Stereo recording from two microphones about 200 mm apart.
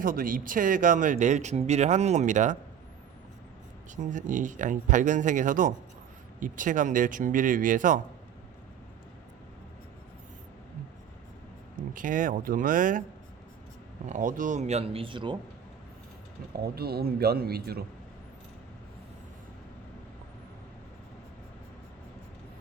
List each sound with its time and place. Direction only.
0.0 s speech: 45° right (ahead or behind)
4.1 s speech: 40° right (ahead or behind)
11.9 s speech: 40° right (ahead or behind)
14.1 s speech: 40° right (ahead or behind); by 15.4 s 25° right (ahead or behind)
16.6 s speech: 50° right (ahead or behind)